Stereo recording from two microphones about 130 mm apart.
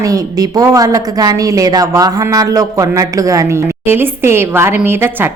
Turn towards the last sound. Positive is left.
turn(degrees=-15)  # may be behind; listen again after turning